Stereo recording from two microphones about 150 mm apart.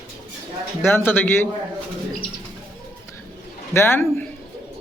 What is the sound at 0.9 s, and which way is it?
Speech, 15° left (ahead or behind).